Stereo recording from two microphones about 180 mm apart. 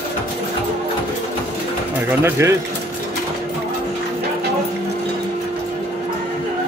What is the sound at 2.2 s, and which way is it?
Speech, 15° right (ahead or behind).